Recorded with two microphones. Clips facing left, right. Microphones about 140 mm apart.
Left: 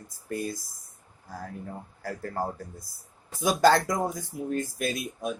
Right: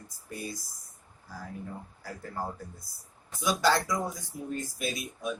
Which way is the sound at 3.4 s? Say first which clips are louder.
Left 5 dB; 50° left (ahead or behind).